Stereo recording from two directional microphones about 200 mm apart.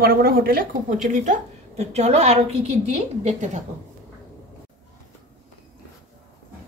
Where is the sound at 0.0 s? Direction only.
50° right (ahead or behind).